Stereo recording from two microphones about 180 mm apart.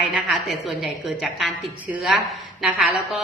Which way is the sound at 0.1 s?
Centre (ahead or behind).